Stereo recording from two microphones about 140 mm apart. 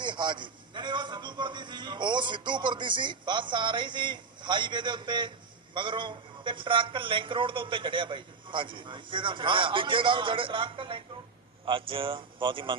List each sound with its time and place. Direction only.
0.0 s a man's voice: 35° right (ahead or behind)